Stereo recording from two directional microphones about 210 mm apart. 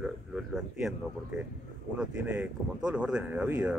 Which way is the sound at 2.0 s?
5° right (ahead or behind).